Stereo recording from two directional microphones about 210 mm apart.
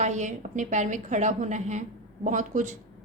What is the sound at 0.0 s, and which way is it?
A woman's voice, 35° right (ahead or behind).